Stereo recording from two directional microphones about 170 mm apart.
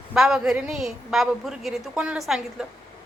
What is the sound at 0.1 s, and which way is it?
A woman's voice, 5° right (ahead or behind).